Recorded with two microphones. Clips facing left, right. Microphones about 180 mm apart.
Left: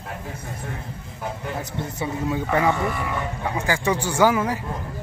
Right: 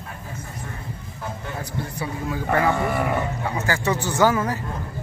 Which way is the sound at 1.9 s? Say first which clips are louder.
Left 4 dB; 20° left (ahead or behind).